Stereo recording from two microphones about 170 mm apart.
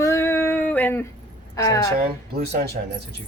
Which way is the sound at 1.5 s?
20° left (ahead or behind).